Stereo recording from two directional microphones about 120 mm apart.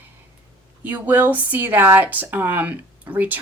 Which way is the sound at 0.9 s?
15° right (ahead or behind).